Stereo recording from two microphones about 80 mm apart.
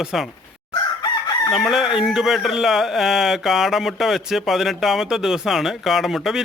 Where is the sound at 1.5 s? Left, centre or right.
Centre.